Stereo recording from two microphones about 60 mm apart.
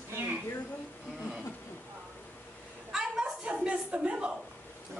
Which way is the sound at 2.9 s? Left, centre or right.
Centre.